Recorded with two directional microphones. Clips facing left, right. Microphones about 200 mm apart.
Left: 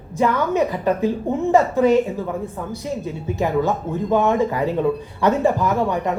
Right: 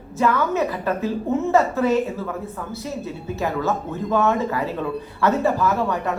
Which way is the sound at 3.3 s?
15° left (ahead or behind).